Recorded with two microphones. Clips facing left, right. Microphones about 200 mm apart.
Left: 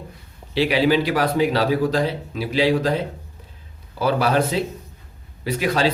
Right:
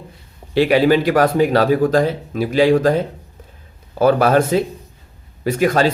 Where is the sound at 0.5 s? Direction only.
50° right (ahead or behind).